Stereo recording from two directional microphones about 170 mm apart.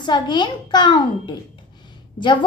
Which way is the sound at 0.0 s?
25° left (ahead or behind).